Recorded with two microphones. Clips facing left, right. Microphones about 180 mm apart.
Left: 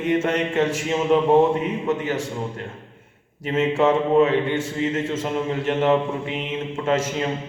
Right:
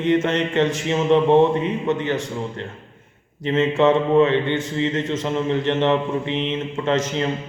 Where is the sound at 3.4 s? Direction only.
10° left (ahead or behind).